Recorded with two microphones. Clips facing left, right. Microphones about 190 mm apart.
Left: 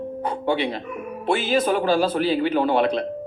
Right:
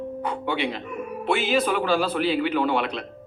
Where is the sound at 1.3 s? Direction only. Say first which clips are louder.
Left 2 dB; 45° left (ahead or behind).